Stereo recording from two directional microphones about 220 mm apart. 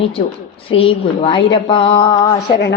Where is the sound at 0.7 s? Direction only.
25° left (ahead or behind).